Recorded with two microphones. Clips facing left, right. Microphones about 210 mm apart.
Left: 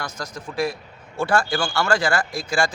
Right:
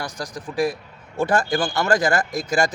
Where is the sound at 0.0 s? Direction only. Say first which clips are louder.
Right 2 dB; 15° right (ahead or behind).